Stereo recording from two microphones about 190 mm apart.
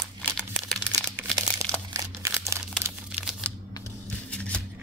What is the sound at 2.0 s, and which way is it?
Crumpling, 20° right (ahead or behind).